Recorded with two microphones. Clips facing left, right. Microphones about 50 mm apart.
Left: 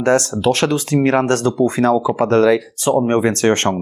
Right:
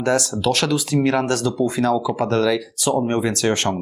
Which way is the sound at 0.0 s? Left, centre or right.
Left.